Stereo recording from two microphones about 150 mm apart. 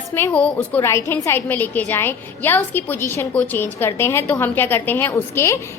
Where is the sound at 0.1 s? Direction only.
10° left (ahead or behind).